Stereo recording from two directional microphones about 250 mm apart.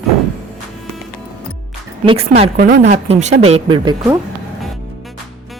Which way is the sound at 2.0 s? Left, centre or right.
Right.